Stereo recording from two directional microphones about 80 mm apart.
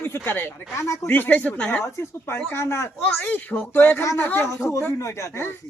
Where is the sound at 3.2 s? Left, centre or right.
Left.